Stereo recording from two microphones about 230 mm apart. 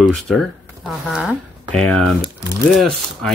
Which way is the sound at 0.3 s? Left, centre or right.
Centre.